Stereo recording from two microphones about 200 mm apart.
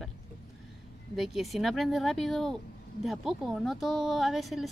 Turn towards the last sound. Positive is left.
turn(degrees=0)  # may be behind; listen again after turning